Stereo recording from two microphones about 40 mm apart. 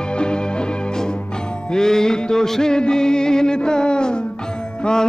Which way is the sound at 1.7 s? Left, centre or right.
Centre.